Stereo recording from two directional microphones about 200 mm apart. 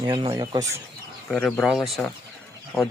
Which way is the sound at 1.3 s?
Centre (ahead or behind).